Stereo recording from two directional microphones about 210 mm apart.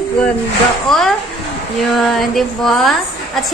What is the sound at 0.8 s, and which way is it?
A woman's voice, centre (ahead or behind).